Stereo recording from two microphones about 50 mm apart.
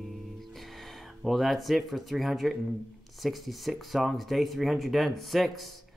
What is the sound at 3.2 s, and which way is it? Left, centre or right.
Speech, centre.